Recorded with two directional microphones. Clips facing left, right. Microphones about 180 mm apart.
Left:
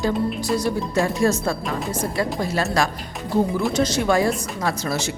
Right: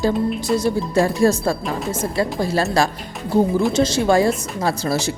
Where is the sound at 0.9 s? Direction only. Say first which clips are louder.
Right 4 dB; 35° right (ahead or behind).